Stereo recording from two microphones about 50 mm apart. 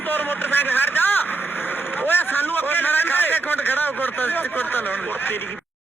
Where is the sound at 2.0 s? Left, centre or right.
Left.